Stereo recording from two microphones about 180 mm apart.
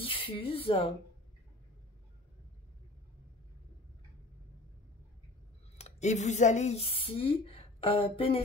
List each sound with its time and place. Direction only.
0.0 s speech: 30° left (ahead or behind)
5.8 s speech: 40° left (ahead or behind)